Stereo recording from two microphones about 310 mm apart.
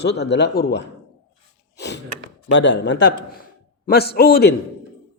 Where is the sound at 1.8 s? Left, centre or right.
Left.